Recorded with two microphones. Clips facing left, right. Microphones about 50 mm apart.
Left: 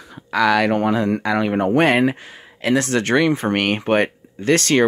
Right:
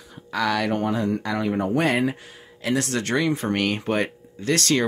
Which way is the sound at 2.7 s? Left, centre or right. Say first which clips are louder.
Left 6 dB; left.